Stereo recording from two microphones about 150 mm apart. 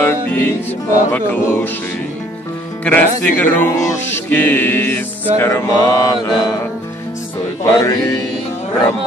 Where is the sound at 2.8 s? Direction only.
10° left (ahead or behind).